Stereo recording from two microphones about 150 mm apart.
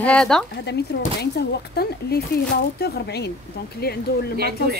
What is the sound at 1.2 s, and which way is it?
Speech, 90° left.